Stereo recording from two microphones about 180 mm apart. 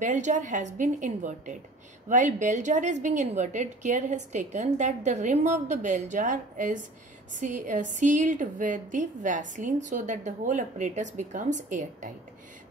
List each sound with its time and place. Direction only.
0.0 s a woman's voice: 45° right (ahead or behind)